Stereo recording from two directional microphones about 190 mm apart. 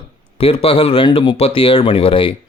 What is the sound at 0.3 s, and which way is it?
Speech, 30° left (ahead or behind).